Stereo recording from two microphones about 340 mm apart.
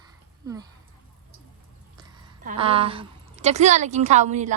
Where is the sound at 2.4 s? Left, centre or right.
Centre.